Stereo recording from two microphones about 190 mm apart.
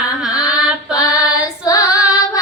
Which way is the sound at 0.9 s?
20° left (ahead or behind).